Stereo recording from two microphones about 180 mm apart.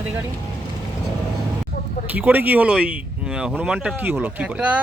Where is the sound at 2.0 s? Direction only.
10° right (ahead or behind).